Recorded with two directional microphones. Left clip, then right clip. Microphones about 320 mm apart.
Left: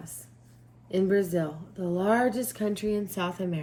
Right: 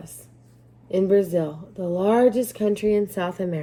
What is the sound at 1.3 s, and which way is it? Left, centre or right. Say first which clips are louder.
A woman's voice: right 6 dB; centre.